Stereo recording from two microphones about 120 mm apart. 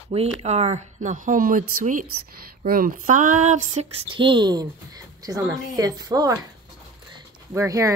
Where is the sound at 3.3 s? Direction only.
85° right.